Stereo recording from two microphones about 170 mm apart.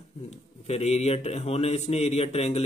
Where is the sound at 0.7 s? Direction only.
40° left (ahead or behind).